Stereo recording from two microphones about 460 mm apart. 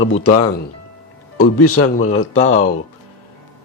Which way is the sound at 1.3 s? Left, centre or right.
Left.